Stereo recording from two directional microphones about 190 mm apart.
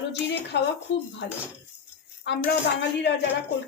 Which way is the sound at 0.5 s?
65° left (ahead or behind).